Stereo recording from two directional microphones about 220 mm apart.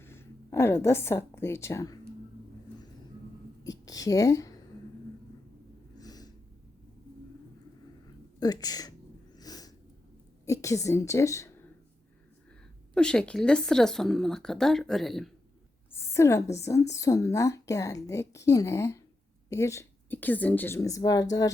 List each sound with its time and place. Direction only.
0.0 s a woman's voice: 10° left (ahead or behind)
3.8 s speech: 15° left (ahead or behind)
6.0 s snort: 15° left (ahead or behind)
8.4 s speech: 15° left (ahead or behind)
9.3 s snort: 15° left (ahead or behind)
10.4 s a woman's voice: 15° left (ahead or behind)
12.9 s a woman's voice: 5° left (ahead or behind)
16.0 s a sound: 10° left (ahead or behind)
16.6 s speech: 15° left (ahead or behind)